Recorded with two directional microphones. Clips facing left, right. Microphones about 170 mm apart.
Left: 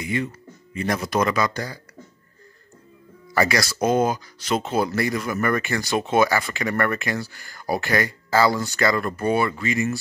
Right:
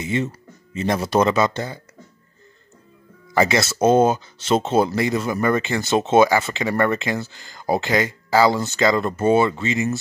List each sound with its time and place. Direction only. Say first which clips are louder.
0.0 s speech: right 3 dB; 25° right (ahead or behind)
3.3 s speech: right 3 dB; 25° right (ahead or behind)